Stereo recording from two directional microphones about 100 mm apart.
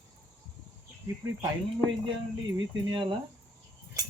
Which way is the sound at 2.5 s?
50° right (ahead or behind).